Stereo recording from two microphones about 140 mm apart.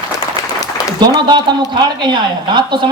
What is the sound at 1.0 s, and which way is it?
A man's voice, 30° right (ahead or behind).